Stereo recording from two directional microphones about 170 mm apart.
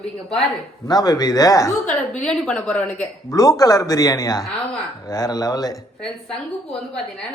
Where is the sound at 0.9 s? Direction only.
25° left (ahead or behind).